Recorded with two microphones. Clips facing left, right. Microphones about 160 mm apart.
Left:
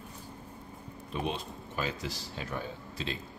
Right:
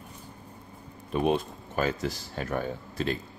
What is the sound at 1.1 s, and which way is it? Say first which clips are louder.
Speech: right 9 dB; 55° right (ahead or behind).